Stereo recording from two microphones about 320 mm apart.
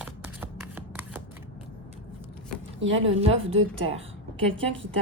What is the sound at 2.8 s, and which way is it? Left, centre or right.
Speech, right.